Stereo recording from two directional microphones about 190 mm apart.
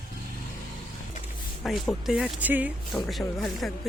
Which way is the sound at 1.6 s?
Centre (ahead or behind).